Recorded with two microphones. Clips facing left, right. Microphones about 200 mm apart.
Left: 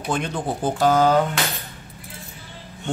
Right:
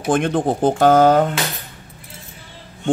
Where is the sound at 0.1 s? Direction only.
55° right (ahead or behind).